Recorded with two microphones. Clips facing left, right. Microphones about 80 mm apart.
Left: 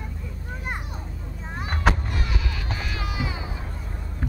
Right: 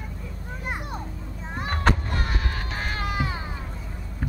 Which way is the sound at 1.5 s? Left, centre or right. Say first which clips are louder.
Even; centre.